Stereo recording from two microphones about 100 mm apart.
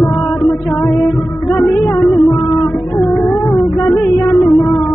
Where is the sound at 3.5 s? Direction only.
25° left (ahead or behind).